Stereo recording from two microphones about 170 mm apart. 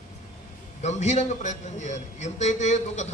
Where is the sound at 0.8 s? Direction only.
40° left (ahead or behind).